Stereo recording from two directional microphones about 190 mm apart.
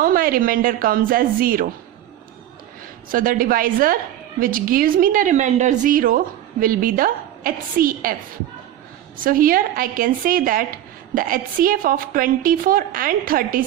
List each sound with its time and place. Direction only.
0.0 s a woman's voice: 50° right (ahead or behind)
3.1 s a woman's voice: 45° right (ahead or behind)
9.2 s a woman's voice: 50° right (ahead or behind)